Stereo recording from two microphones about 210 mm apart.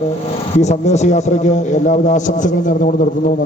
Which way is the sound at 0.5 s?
35° left (ahead or behind).